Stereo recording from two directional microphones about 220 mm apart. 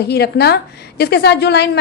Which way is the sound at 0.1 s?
50° left (ahead or behind).